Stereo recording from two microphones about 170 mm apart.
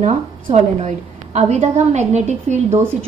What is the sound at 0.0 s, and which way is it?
A woman's voice, 40° right (ahead or behind).